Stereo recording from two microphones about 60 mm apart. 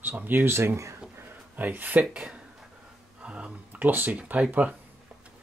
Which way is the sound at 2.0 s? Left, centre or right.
Centre.